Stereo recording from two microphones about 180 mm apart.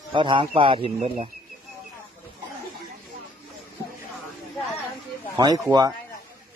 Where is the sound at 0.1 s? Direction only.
25° right (ahead or behind).